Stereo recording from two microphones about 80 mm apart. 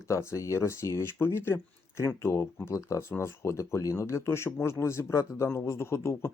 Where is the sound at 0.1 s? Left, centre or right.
Left.